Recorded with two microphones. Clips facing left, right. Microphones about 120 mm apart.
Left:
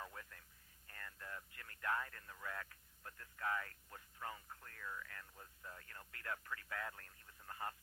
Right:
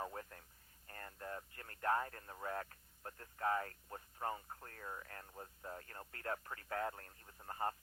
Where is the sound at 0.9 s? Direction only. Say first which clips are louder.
Right 5 dB; 35° right (ahead or behind).